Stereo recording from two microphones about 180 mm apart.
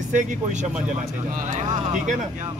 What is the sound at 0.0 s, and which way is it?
Speech, 45° right (ahead or behind).